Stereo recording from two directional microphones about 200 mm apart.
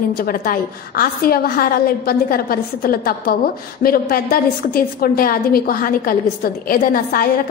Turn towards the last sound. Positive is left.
turn(degrees=45)  # may be behind; listen again after turning